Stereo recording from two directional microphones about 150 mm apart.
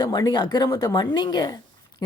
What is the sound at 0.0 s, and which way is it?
Speech, 25° left (ahead or behind).